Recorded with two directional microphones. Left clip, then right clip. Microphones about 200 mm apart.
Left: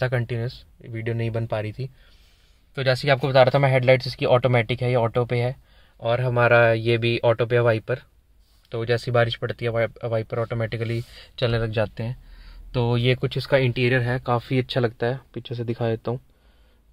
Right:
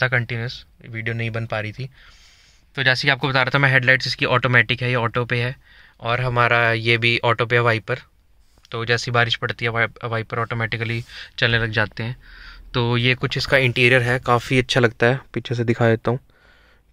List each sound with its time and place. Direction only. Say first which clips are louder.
0.0 s speech: right 5 dB; 10° left (ahead or behind); by 16.2 s 15° right (ahead or behind)